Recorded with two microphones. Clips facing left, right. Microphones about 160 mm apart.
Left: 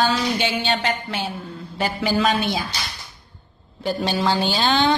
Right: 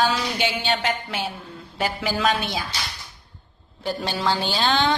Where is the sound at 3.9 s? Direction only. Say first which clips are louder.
Left 3 dB; centre (ahead or behind).